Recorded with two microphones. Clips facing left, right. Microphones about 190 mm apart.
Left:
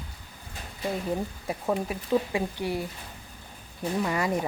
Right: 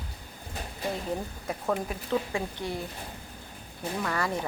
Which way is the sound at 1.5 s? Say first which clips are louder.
Left 1 dB; 15° left (ahead or behind).